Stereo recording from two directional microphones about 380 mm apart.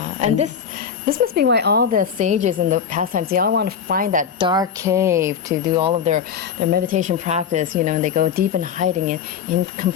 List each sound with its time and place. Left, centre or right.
0.0 s a woman's voice: centre